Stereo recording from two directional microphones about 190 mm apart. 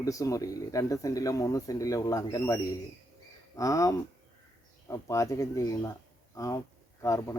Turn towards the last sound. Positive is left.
turn(degrees=15)  # may be behind; listen again after turning